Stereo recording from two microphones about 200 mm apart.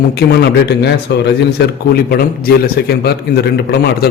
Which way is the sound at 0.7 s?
55° left (ahead or behind).